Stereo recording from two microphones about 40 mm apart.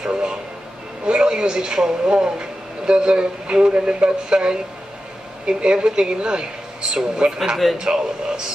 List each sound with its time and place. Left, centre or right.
0.0 s speech: right